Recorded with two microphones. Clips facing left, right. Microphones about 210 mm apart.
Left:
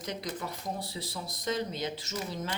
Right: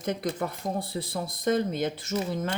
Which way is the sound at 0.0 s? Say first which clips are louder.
Right 7 dB; 55° right (ahead or behind).